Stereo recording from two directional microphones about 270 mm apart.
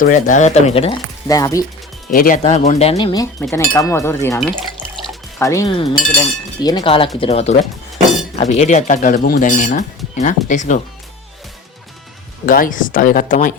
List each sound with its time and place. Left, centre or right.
0.0 s speech: left; by 1.6 s centre
2.0 s speech: left
12.5 s speech: left